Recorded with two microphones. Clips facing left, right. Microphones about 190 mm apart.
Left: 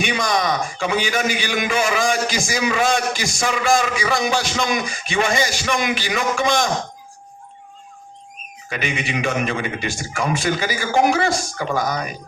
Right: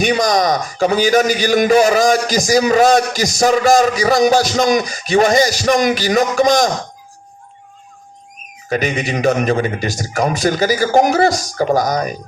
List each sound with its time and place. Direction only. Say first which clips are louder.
0.0 s a man's voice: right 6 dB; 40° right (ahead or behind)
8.7 s a man's voice: right 6 dB; 40° right (ahead or behind)